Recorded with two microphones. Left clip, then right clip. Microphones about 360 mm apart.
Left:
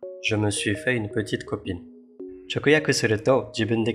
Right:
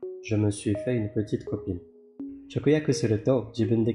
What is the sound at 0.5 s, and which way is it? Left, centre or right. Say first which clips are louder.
Speech: left 3 dB; left.